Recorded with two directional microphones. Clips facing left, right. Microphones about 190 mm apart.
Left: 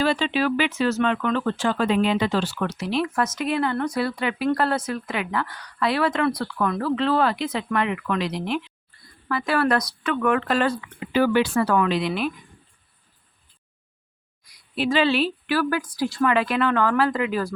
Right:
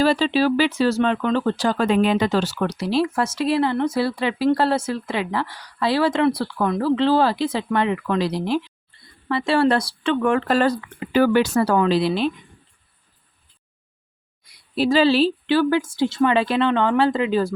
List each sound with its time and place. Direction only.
0.0 s speech: 35° right (ahead or behind)
14.4 s speech: 30° right (ahead or behind)